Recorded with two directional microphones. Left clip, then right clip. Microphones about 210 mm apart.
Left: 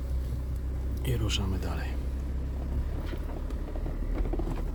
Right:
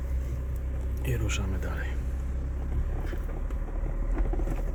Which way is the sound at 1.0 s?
Centre (ahead or behind).